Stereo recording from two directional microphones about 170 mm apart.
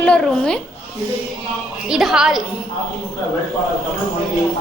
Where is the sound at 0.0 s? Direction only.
5° left (ahead or behind).